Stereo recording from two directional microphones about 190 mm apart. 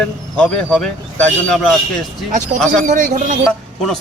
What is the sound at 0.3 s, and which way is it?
A man's voice, 5° left (ahead or behind).